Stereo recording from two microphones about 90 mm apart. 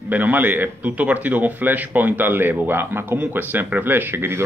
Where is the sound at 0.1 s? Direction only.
20° right (ahead or behind).